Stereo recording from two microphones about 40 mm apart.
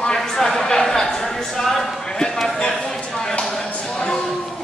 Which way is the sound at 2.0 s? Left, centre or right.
Centre.